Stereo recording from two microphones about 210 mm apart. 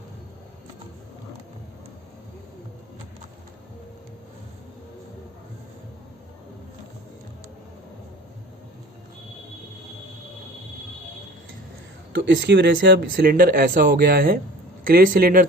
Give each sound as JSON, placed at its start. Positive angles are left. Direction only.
{"t": 12.1, "sound": "speech", "side_deg": -60}